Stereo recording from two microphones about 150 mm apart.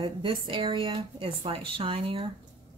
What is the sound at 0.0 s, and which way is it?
Speech, 35° right (ahead or behind).